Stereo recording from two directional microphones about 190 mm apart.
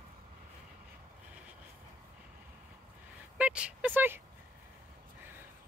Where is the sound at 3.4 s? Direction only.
5° right (ahead or behind).